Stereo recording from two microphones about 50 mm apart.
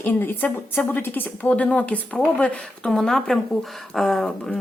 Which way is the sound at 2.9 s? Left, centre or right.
Centre.